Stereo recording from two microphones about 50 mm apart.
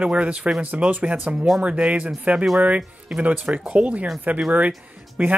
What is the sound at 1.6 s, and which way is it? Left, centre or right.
Speech, right.